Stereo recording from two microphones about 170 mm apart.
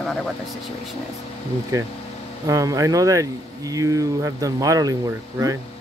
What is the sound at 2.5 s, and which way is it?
Speech, 20° right (ahead or behind).